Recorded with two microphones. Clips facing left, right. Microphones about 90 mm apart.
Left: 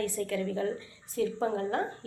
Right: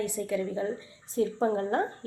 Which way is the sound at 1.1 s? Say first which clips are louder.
Right 3 dB; 30° right (ahead or behind).